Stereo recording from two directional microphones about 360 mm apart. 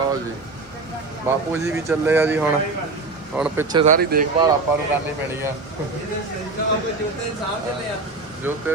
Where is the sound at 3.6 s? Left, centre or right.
Right.